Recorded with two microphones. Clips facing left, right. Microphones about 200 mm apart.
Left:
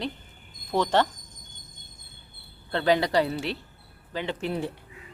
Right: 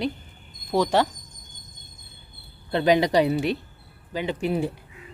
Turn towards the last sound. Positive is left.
turn(degrees=-15)  # may be behind; listen again after turning